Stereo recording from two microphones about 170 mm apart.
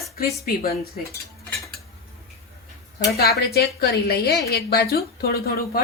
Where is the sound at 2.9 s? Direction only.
65° left (ahead or behind).